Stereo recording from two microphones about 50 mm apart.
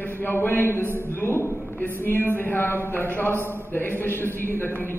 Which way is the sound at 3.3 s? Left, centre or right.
Right.